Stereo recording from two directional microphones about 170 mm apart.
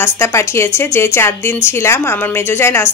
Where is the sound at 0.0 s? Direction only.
15° left (ahead or behind).